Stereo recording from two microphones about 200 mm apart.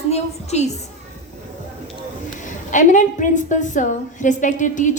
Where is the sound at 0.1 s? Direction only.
35° left (ahead or behind).